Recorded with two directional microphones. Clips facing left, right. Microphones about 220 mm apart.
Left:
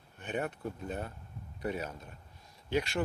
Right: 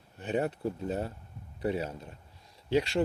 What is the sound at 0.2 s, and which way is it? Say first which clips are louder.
Speech: right 5 dB; 30° right (ahead or behind).